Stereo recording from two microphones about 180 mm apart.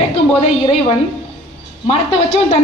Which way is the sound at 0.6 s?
30° left (ahead or behind).